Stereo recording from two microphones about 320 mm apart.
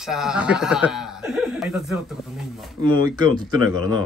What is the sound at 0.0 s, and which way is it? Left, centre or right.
Speech, centre.